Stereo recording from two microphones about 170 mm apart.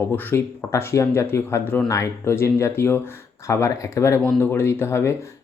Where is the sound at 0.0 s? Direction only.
15° left (ahead or behind).